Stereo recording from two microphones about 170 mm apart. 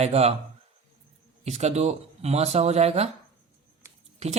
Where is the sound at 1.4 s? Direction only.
40° right (ahead or behind).